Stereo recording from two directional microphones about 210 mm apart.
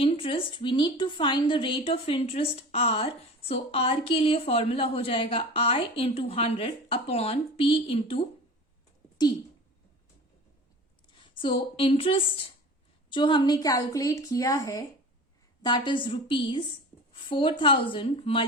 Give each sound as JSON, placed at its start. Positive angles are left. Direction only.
{"t": 0.0, "sound": "a woman's voice", "side_deg": 25}
{"t": 11.1, "sound": "a woman's voice", "side_deg": 25}